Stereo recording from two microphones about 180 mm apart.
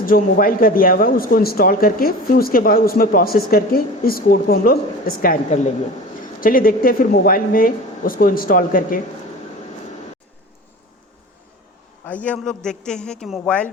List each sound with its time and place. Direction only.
0.0 s speech: 50° left (ahead or behind)
12.0 s a man's voice: 10° left (ahead or behind)